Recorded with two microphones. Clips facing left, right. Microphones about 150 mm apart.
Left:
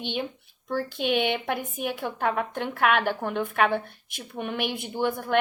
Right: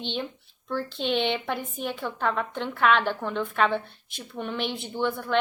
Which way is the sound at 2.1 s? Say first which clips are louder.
Left 1 dB; 55° left (ahead or behind).